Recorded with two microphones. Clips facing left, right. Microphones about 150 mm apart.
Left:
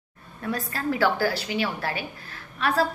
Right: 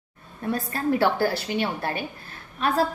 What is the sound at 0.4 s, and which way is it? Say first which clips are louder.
Speech: right 2 dB; 25° right (ahead or behind).